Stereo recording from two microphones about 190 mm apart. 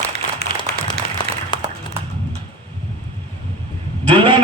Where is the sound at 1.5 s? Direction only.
25° left (ahead or behind).